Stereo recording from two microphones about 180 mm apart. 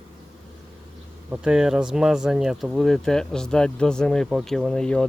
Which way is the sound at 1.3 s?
5° right (ahead or behind).